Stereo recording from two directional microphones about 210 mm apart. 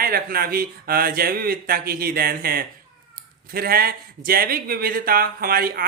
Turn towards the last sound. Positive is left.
turn(degrees=-45)  # may be behind; listen again after turning